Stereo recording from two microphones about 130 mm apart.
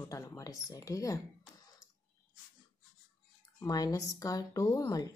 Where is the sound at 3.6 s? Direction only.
25° left (ahead or behind).